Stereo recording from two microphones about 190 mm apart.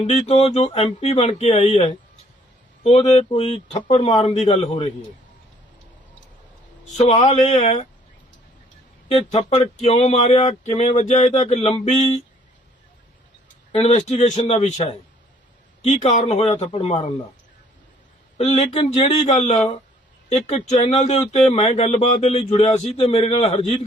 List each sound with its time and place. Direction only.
0.3 s speech: 30° left (ahead or behind)
6.8 s speech: 35° left (ahead or behind)
9.0 s speech: 35° left (ahead or behind)
13.7 s speech: 35° left (ahead or behind)
18.3 s speech: 35° left (ahead or behind)